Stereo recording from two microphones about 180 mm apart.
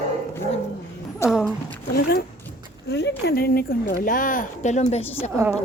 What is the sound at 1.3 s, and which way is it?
Speech, centre (ahead or behind).